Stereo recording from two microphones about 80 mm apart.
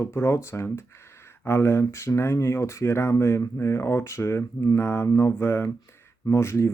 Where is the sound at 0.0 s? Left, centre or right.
Left.